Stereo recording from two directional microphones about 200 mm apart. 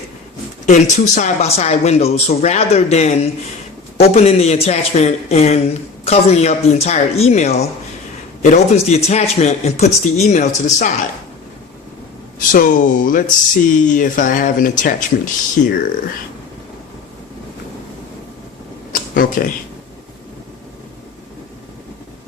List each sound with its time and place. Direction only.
0.6 s speech: 35° left (ahead or behind)
12.5 s speech: 45° left (ahead or behind)
18.9 s speech: 45° left (ahead or behind)